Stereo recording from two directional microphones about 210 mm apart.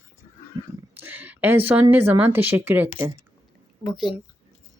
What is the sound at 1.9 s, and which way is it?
Speech, 10° right (ahead or behind).